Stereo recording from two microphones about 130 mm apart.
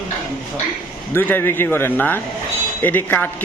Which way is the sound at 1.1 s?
15° left (ahead or behind).